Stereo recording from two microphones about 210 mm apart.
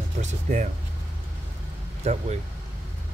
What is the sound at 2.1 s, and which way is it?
Speech, 30° right (ahead or behind).